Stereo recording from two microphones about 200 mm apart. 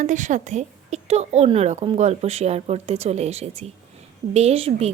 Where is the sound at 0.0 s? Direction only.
40° right (ahead or behind).